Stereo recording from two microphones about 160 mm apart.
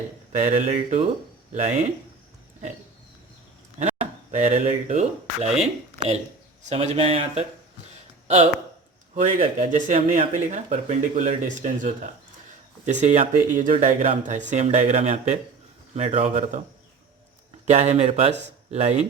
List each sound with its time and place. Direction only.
0.3 s speech: 50° right (ahead or behind)
3.8 s speech: 45° right (ahead or behind)
6.6 s speech: 45° right (ahead or behind)
9.1 s speech: 50° right (ahead or behind)
17.7 s speech: 45° right (ahead or behind)